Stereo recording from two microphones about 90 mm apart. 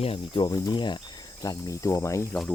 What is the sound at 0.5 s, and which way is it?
Speech, 55° left (ahead or behind).